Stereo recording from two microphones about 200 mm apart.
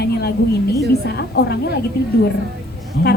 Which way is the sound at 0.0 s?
55° left (ahead or behind).